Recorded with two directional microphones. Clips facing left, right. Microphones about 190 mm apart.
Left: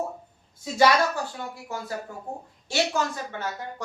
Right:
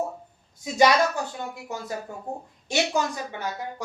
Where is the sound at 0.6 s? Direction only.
15° right (ahead or behind).